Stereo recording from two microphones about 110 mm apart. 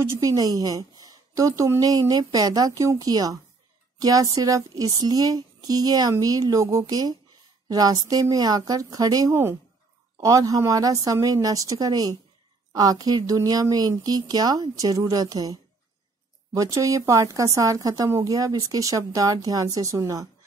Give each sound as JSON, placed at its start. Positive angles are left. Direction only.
{"t": 0.0, "sound": "speech", "side_deg": -30}